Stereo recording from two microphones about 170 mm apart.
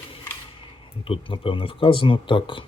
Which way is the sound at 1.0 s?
30° left (ahead or behind).